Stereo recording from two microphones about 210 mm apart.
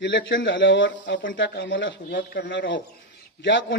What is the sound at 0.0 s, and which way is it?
A man's voice, 60° left (ahead or behind).